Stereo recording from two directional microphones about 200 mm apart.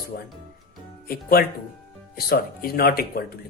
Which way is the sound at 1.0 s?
50° left (ahead or behind).